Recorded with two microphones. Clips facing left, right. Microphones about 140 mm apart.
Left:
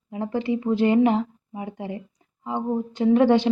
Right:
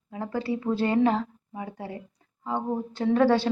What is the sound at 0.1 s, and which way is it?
A woman's voice, 20° left (ahead or behind).